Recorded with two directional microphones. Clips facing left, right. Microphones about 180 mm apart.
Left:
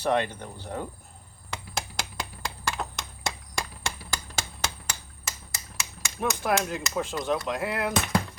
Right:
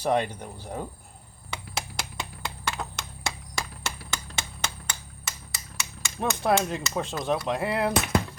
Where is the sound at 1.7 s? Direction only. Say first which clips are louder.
Left 1 dB; centre (ahead or behind).